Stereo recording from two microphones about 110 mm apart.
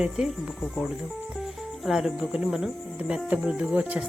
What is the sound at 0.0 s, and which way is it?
Speech, 5° right (ahead or behind).